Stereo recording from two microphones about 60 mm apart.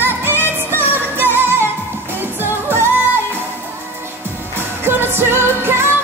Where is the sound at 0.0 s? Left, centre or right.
Right.